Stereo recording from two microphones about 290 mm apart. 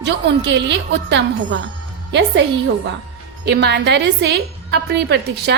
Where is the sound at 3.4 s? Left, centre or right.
Right.